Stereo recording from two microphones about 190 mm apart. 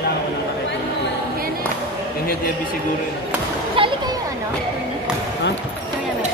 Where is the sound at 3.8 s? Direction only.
30° right (ahead or behind).